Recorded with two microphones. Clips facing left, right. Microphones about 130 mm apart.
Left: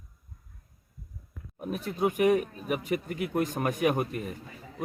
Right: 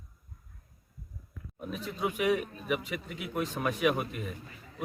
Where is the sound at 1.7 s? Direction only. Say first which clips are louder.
Left 5 dB; 50° left (ahead or behind).